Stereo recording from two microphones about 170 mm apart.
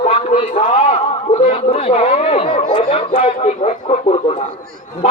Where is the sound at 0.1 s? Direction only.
35° left (ahead or behind).